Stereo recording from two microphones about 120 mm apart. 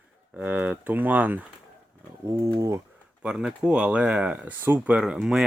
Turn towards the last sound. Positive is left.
turn(degrees=-5)  # may be behind; listen again after turning